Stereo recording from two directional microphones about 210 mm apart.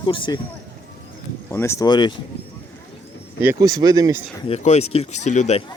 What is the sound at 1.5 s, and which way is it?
Speech, 10° left (ahead or behind).